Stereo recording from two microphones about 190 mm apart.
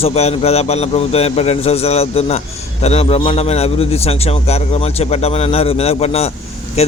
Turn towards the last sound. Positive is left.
turn(degrees=35)  # may be behind; listen again after turning